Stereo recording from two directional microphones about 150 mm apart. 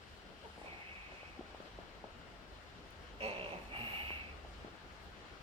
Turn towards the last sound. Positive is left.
turn(degrees=-35)  # may be behind; listen again after turning